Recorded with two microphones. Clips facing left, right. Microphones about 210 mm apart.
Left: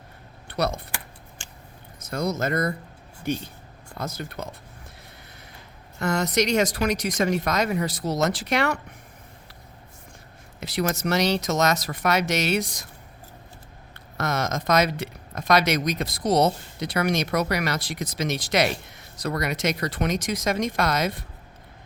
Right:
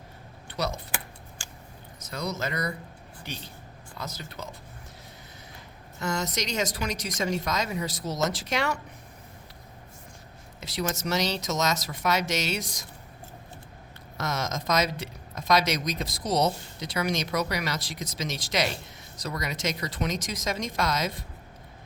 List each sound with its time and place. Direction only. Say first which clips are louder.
0.4 s computer keyboard: left 5 dB; 60° left (ahead or behind)
2.0 s speech: left 6 dB; 50° left (ahead or behind)
6.0 s speech: left 7 dB; 55° left (ahead or behind)
10.6 s speech: left 5 dB; 60° left (ahead or behind)
13.9 s speech: left 4 dB; 60° left (ahead or behind)